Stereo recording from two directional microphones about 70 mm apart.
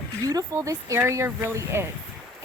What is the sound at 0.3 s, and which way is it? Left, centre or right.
Speech, right.